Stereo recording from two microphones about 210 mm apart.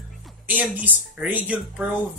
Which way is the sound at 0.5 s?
5° right (ahead or behind).